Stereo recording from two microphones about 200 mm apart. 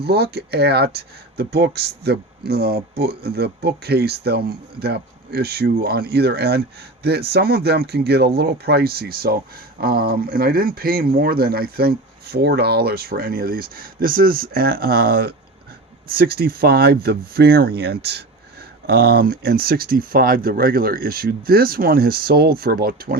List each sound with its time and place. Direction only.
0.0 s speech: 50° right (ahead or behind)